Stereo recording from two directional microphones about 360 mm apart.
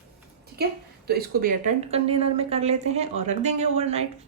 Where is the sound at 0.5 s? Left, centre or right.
Right.